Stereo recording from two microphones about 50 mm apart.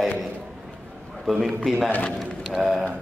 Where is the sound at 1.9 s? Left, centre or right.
Left.